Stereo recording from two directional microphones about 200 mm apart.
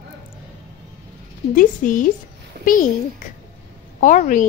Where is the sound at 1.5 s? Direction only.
40° left (ahead or behind).